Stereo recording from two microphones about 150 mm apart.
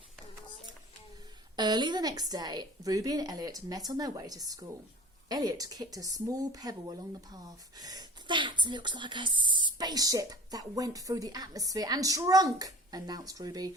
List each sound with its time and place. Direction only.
1.5 s speech: 30° right (ahead or behind)